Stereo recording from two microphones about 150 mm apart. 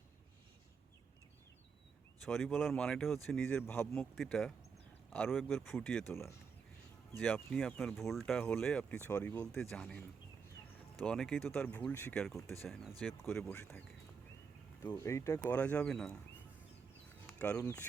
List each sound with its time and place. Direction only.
2.2 s speech: centre (ahead or behind)
4.1 s speech: centre (ahead or behind)
7.2 s speech: 5° left (ahead or behind)
17.1 s a sound: 10° left (ahead or behind)
17.6 s speech: 15° left (ahead or behind)